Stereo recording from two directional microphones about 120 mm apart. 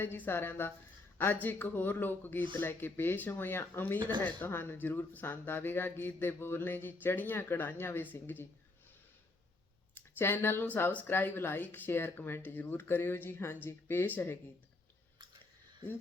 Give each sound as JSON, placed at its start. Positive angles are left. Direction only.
{"t": 0.0, "sound": "speech", "side_deg": 20}
{"t": 9.9, "sound": "speech", "side_deg": 20}